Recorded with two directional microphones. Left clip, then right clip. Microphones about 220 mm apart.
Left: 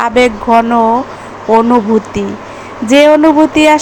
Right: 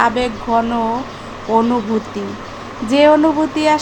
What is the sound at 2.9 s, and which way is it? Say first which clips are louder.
Speech: left 5 dB; 20° left (ahead or behind).